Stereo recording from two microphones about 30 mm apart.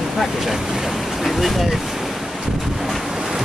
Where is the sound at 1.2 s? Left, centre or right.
Centre.